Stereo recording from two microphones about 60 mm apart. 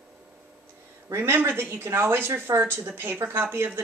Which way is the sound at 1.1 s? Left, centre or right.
Right.